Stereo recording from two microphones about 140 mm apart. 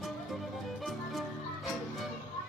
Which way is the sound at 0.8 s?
Centre (ahead or behind).